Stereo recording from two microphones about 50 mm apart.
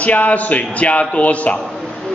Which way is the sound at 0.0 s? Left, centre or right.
Left.